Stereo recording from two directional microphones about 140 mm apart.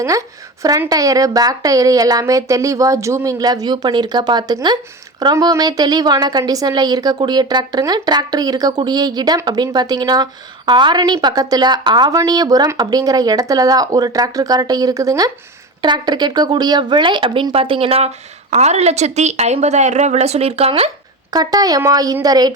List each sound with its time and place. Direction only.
0.0 s a woman's voice: 25° right (ahead or behind); by 20.9 s 45° right (ahead or behind)
21.2 s a woman's voice: 25° right (ahead or behind)